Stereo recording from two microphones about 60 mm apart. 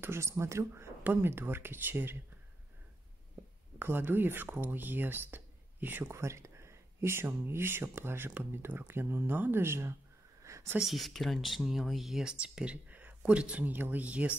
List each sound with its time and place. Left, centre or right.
0.0 s speech: right
1.0 s speech: right
3.8 s speech: right
6.0 s speech: right
10.4 s a sound: right
10.8 s speech: centre
12.8 s speech: right